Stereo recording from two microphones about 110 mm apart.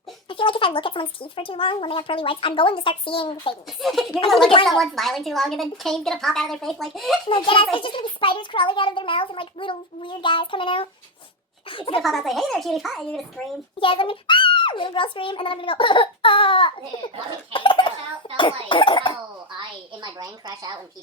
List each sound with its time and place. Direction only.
0.3 s a child's voice: 50° left (ahead or behind)
3.8 s a woman's voice: centre (ahead or behind)
7.3 s a child's voice: 55° left (ahead or behind)
12.0 s a woman's voice: centre (ahead or behind)
13.7 s a child's voice: 55° left (ahead or behind)
17.5 s a sound: 50° left (ahead or behind)
18.3 s cough: 50° left (ahead or behind)
19.5 s a sound: 40° right (ahead or behind)